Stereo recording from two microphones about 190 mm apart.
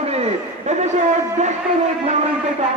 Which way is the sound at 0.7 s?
35° right (ahead or behind).